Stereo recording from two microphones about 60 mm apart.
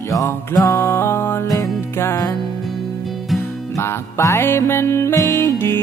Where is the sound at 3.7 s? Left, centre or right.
Left.